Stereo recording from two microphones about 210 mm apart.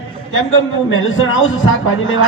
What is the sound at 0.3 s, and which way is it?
A man's voice, 70° left (ahead or behind).